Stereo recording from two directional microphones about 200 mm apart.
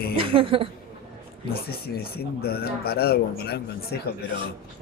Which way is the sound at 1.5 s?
50° left (ahead or behind).